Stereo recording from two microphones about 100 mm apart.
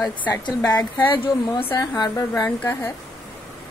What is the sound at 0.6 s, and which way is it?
Speech, 40° left (ahead or behind).